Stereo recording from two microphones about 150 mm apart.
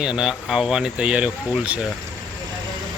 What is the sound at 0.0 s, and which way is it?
Speech, 5° right (ahead or behind).